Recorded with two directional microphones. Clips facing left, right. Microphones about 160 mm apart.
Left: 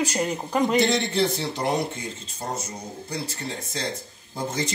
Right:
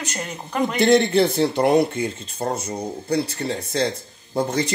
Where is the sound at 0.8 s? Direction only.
55° right (ahead or behind).